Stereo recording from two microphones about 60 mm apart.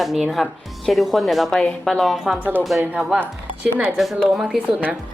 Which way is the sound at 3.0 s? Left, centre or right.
Centre.